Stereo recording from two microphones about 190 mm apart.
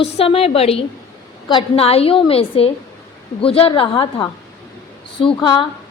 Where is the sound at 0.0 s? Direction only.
30° left (ahead or behind).